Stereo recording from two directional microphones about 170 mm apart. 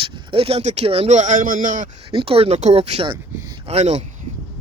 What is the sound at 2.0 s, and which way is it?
Speech, 35° right (ahead or behind).